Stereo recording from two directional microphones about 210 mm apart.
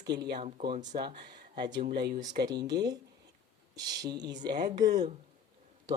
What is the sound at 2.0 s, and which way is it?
Speech, 40° right (ahead or behind).